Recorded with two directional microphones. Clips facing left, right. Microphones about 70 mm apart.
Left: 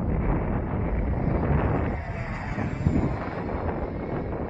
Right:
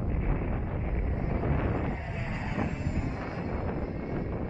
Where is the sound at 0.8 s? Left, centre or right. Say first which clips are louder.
Left 6 dB; left.